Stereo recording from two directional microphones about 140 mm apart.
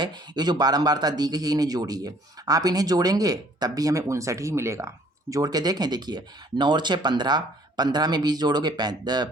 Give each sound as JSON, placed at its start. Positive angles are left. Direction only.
{"t": 0.0, "sound": "speech", "side_deg": -30}